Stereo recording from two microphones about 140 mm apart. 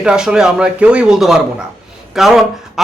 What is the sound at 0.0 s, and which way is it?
A man's voice, 5° right (ahead or behind).